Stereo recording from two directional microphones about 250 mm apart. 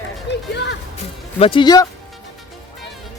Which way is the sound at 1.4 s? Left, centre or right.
Centre.